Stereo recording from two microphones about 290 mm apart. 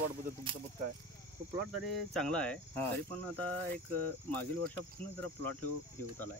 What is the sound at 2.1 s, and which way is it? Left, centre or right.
Cricket, centre.